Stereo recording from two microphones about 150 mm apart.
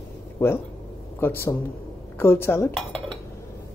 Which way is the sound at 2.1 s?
15° left (ahead or behind).